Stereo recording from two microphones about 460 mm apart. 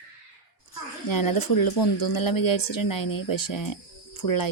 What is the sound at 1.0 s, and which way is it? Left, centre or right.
Speech, left.